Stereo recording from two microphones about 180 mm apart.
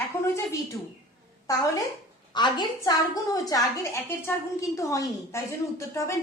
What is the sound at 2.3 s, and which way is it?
A woman's voice, 25° left (ahead or behind).